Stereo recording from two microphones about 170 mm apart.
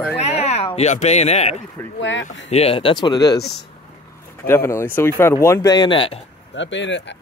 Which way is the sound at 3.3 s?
75° left (ahead or behind).